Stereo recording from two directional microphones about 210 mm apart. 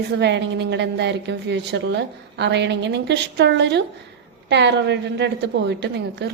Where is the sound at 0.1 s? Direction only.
55° right (ahead or behind).